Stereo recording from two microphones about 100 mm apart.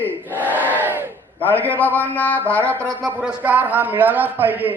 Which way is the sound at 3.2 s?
15° right (ahead or behind).